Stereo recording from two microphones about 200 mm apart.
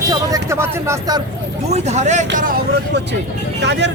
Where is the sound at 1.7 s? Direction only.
35° right (ahead or behind).